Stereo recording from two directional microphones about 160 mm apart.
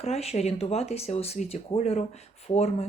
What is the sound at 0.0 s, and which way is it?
A woman's voice, 40° left (ahead or behind).